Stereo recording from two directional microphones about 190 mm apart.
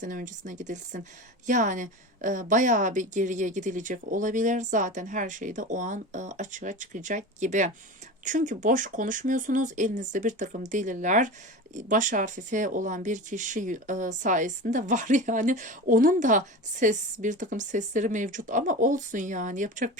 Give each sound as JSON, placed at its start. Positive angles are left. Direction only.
{"t": 0.0, "sound": "a woman's voice", "side_deg": -45}